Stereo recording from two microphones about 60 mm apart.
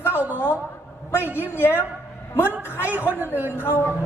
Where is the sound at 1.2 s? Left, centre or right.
Right.